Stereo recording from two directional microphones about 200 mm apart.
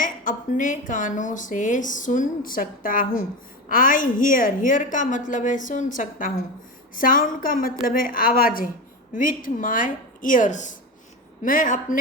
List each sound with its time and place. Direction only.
0.0 s a woman's voice: 40° left (ahead or behind)